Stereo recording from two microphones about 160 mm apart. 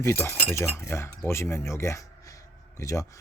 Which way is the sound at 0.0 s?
15° left (ahead or behind).